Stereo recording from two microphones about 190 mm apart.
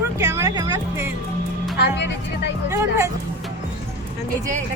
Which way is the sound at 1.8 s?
60° left (ahead or behind).